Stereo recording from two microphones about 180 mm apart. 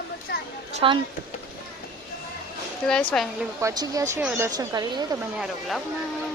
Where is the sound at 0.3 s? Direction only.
60° left (ahead or behind).